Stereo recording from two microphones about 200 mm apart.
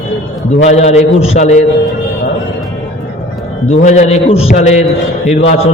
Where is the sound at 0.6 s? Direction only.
35° left (ahead or behind).